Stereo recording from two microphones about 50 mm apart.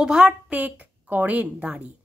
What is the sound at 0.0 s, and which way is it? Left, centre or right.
A woman's voice, centre.